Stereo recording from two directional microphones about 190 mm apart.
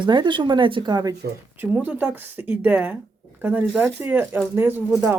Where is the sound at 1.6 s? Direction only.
10° right (ahead or behind).